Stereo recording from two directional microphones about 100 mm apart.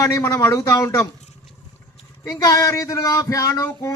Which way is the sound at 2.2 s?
35° left (ahead or behind).